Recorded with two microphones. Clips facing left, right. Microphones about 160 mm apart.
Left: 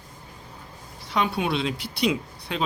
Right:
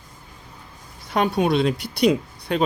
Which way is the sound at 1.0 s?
50° right (ahead or behind).